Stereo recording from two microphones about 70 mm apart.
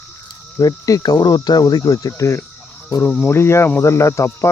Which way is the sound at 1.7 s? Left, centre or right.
Left.